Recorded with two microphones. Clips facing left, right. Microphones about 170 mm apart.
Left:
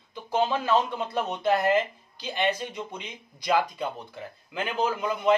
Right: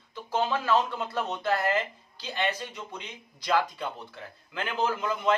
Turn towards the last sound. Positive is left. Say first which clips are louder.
# left 2 dB
turn(degrees=15)  # may be behind; listen again after turning